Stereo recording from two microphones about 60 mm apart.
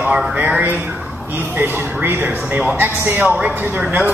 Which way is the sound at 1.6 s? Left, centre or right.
Right.